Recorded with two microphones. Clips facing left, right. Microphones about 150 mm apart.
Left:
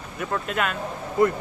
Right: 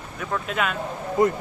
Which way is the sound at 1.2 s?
20° right (ahead or behind).